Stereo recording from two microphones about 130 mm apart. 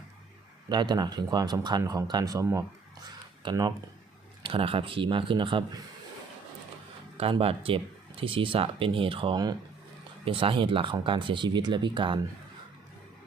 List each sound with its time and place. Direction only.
0.7 s speech: 35° right (ahead or behind)
3.4 s speech: 35° right (ahead or behind)
7.2 s speech: 45° right (ahead or behind)
10.2 s speech: 45° right (ahead or behind)